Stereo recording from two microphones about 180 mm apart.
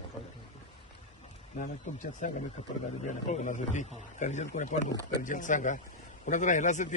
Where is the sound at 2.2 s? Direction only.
45° left (ahead or behind).